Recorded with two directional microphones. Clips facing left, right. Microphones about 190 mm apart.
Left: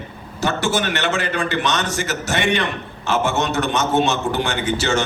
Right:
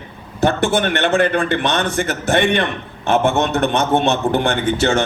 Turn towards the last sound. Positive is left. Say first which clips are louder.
# right 4 dB
turn(degrees=-55)  # may be behind; listen again after turning